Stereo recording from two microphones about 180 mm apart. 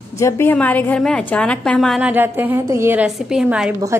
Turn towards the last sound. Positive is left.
turn(degrees=-15)  # may be behind; listen again after turning